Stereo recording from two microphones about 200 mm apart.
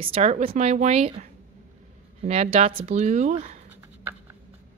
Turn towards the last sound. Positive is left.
turn(degrees=-35)  # may be behind; listen again after turning